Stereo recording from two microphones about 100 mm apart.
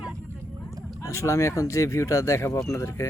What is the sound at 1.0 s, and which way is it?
Speech, 30° left (ahead or behind).